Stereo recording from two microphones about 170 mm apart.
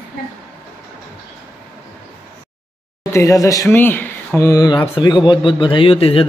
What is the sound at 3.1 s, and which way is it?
Speech, 20° left (ahead or behind).